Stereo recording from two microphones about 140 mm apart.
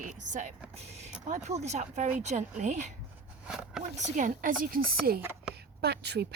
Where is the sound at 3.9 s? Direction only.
60° right (ahead or behind); by 5.2 s 90° right.